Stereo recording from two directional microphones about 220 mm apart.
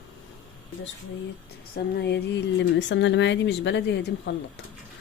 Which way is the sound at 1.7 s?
50° left (ahead or behind).